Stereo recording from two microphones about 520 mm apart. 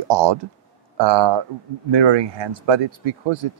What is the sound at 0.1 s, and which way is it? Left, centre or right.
Speech, right.